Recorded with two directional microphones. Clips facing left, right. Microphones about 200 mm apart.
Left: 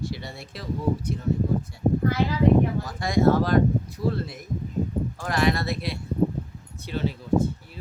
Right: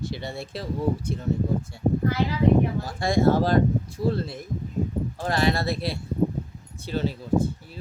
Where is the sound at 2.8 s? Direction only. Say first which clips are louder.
Even; 30° right (ahead or behind).